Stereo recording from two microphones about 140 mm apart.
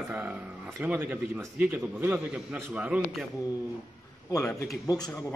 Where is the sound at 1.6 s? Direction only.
10° right (ahead or behind).